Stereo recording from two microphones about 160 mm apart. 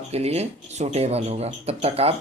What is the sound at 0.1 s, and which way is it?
Speech, 40° right (ahead or behind).